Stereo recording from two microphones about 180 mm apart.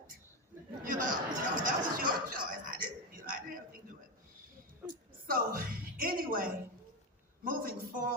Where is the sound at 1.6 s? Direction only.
50° right (ahead or behind).